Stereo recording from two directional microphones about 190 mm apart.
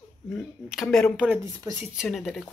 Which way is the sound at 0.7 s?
Centre (ahead or behind).